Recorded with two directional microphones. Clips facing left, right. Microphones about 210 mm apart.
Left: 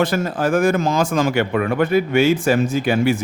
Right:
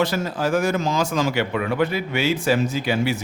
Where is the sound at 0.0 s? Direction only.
50° left (ahead or behind).